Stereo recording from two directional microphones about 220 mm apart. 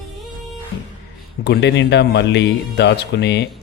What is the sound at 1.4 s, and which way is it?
A man's voice, 50° left (ahead or behind).